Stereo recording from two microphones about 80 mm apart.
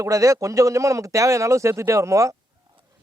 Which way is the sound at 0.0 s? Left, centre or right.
Right.